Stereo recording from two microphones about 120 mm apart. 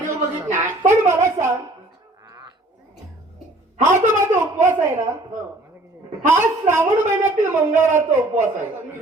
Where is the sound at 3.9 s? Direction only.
20° right (ahead or behind).